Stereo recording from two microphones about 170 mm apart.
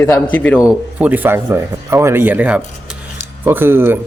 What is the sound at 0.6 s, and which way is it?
A man's voice, 5° right (ahead or behind).